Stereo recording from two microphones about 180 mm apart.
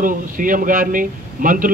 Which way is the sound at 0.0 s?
50° right (ahead or behind).